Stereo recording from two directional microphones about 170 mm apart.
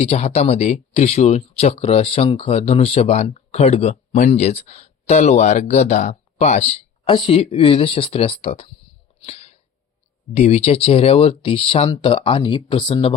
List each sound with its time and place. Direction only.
0.0 s speech: 35° left (ahead or behind)
9.2 s a sound: 35° left (ahead or behind)
10.3 s speech: 40° left (ahead or behind)